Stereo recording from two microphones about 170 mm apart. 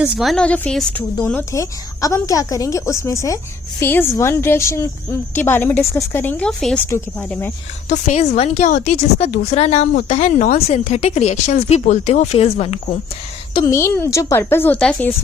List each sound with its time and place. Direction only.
0.0 s a woman's voice: centre (ahead or behind)
7.9 s a woman's voice: 45° left (ahead or behind); by 13.7 s 25° left (ahead or behind)
13.7 s a woman's voice: 15° left (ahead or behind)